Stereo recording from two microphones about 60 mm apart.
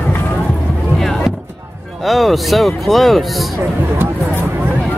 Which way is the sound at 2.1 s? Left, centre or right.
Centre.